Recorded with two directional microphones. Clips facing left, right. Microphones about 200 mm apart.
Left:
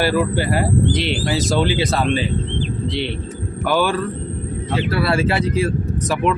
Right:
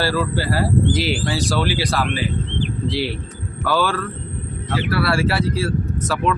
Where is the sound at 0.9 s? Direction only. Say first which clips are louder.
Even; 5° right (ahead or behind).